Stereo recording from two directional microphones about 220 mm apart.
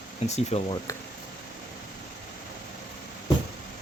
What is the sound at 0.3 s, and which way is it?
Speech, 30° left (ahead or behind).